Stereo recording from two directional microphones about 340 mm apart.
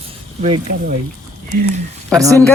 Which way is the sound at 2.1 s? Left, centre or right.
Centre.